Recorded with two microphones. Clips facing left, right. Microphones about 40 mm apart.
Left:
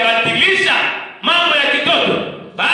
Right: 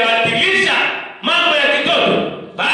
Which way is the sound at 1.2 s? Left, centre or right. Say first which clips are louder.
Even; centre.